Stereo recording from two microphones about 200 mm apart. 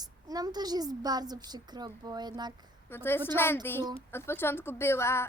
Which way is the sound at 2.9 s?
10° left (ahead or behind).